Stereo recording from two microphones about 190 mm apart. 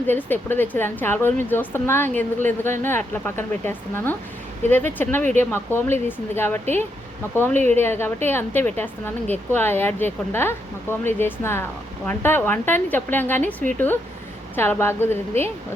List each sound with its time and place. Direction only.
0.1 s a woman's voice: 10° left (ahead or behind)
7.5 s speech: 40° right (ahead or behind)
7.8 s a woman's voice: 10° left (ahead or behind)